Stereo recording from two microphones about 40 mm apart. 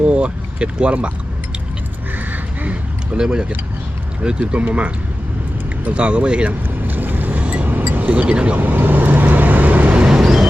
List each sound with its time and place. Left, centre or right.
0.0 s speech: right
2.1 s a sound: right
3.2 s speech: right
6.8 s boat: right
7.4 s vehicle: right
7.9 s a sound: right
8.3 s speech: right
8.5 s vehicle: right
10.2 s vehicle: centre